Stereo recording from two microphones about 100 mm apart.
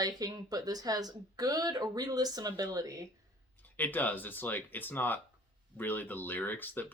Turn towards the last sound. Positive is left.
turn(degrees=20)  # may be behind; listen again after turning